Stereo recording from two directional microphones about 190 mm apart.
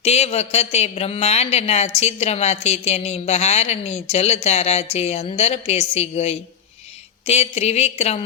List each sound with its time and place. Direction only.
0.0 s a man's voice: 35° left (ahead or behind)